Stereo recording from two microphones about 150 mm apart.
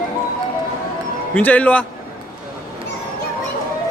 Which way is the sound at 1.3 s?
10° left (ahead or behind).